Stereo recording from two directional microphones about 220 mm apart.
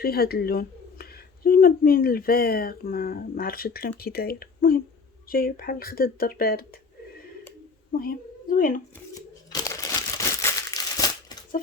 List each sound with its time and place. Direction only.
0.0 s speech: 45° left (ahead or behind)
7.9 s a woman's voice: 40° left (ahead or behind)
9.5 s crumpling: 15° left (ahead or behind)